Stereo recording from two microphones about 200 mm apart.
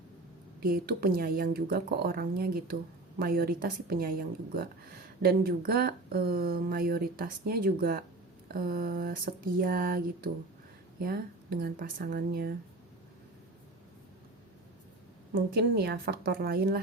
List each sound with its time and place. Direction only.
0.6 s speech: 50° right (ahead or behind)
15.4 s speech: 50° right (ahead or behind)